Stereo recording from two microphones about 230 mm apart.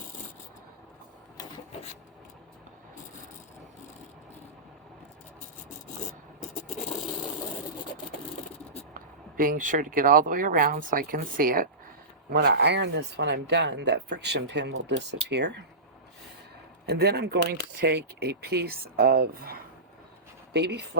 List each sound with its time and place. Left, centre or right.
9.4 s speech: right
16.9 s speech: right